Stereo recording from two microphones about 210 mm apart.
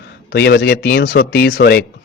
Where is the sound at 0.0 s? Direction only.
50° left (ahead or behind).